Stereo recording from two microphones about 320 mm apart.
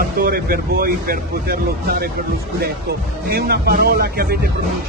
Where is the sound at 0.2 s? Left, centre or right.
Right.